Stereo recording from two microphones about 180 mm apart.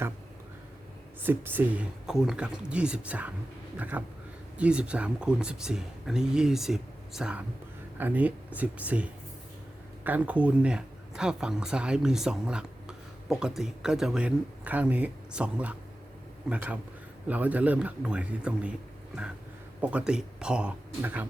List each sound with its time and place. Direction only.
1.2 s speech: 10° right (ahead or behind)
19.8 s speech: 5° right (ahead or behind)